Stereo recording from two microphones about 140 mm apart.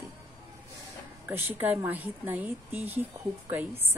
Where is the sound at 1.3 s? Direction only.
15° right (ahead or behind).